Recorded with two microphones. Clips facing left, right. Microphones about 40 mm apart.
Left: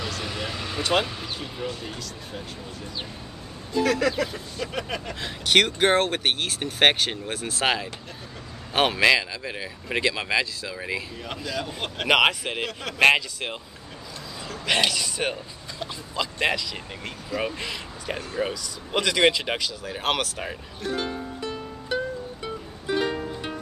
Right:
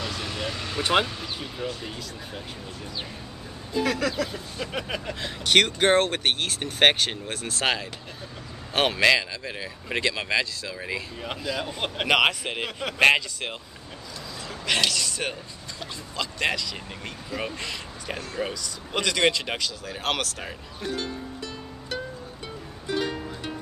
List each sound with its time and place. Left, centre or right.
0.2 s vehicle: centre
1.0 s speech: centre
1.7 s speech: centre
3.7 s speech: centre
11.2 s speech: centre
12.1 s speech: centre
14.7 s speech: centre
20.9 s music: left
21.8 s music: centre